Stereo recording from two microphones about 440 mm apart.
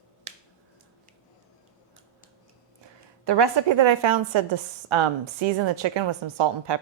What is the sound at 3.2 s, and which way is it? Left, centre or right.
A woman's voice, right.